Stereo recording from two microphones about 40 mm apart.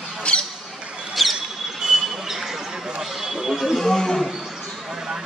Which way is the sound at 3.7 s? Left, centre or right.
Centre.